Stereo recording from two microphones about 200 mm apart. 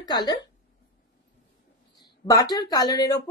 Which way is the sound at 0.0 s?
20° left (ahead or behind).